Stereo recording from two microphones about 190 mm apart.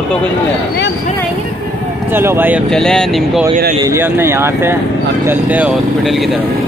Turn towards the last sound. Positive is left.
turn(degrees=0)  # may be behind; listen again after turning